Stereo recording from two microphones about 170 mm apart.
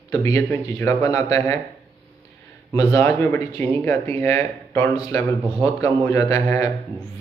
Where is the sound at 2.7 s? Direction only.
20° left (ahead or behind).